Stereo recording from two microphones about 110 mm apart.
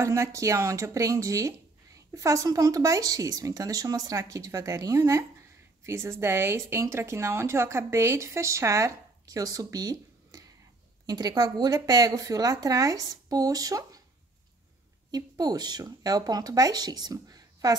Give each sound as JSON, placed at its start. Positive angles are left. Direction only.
{"t": 0.0, "sound": "speech", "side_deg": -25}
{"t": 15.0, "sound": "speech", "side_deg": -35}